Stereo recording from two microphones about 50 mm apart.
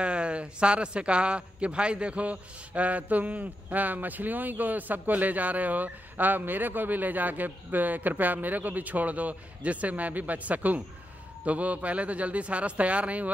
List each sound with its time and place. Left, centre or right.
0.0 s a man's voice: right